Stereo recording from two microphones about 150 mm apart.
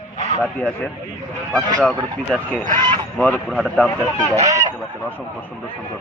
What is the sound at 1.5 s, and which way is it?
Speech, 5° left (ahead or behind).